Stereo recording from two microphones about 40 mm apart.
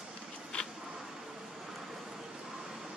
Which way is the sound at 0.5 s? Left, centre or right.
Left.